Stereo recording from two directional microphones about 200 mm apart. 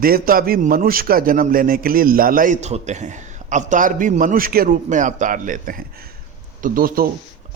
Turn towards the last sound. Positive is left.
turn(degrees=-45)  # may be behind; listen again after turning